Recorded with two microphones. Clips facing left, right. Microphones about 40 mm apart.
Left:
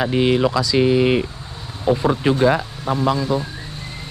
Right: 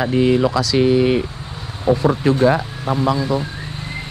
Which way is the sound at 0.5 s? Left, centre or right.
Right.